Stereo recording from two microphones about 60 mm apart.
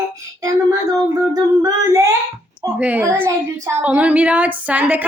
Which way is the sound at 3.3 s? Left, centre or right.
Right.